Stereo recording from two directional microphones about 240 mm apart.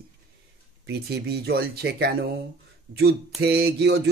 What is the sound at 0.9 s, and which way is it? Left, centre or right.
Speech, right.